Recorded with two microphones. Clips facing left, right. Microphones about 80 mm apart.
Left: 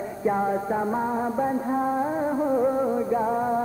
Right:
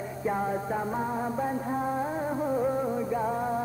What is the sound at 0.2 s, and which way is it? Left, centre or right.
Music, left.